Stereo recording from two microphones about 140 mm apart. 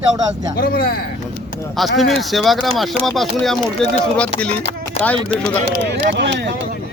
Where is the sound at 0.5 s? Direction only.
90° left.